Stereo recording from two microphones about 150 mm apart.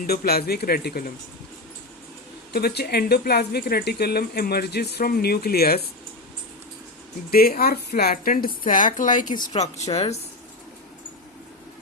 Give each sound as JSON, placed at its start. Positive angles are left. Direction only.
{"t": 0.1, "sound": "speech", "side_deg": 90}
{"t": 2.5, "sound": "speech", "side_deg": 90}
{"t": 7.3, "sound": "a woman's voice", "side_deg": 85}
{"t": 9.5, "sound": "speech", "side_deg": 45}